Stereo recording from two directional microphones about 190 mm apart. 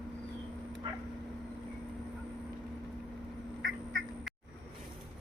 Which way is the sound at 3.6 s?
80° right.